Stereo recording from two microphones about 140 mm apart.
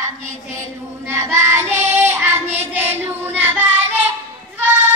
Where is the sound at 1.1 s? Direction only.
15° right (ahead or behind).